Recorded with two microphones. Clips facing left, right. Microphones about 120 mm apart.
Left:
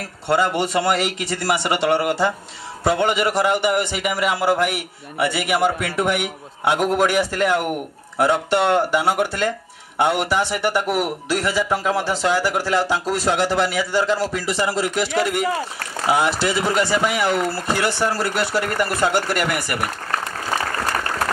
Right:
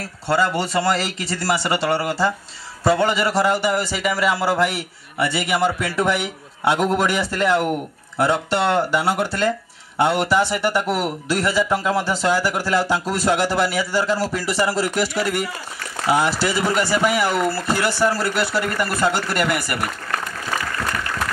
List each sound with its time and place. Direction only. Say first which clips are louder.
0.3 s a man's voice: left 1 dB; 20° left (ahead or behind)
16.1 s a man's voice: even; 20° left (ahead or behind)